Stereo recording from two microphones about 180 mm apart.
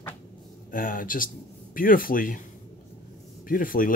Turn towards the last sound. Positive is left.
turn(degrees=50)  # may be behind; listen again after turning